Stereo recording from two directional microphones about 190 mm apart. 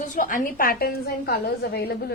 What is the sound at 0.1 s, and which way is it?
A woman's voice, 45° left (ahead or behind).